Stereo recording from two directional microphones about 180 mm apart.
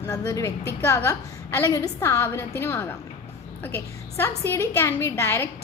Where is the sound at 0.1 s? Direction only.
15° left (ahead or behind).